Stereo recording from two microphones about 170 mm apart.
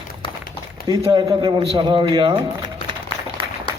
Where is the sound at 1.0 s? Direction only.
25° right (ahead or behind).